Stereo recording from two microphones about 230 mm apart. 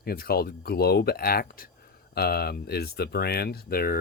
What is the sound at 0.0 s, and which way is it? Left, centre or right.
Speech, left.